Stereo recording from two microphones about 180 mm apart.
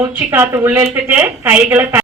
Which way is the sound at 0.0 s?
15° right (ahead or behind).